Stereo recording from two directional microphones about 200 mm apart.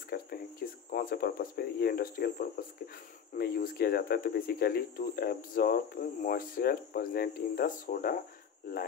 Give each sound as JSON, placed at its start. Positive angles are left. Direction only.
{"t": 0.1, "sound": "speech", "side_deg": 50}